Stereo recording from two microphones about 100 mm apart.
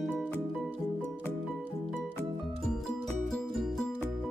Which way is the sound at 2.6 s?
5° left (ahead or behind).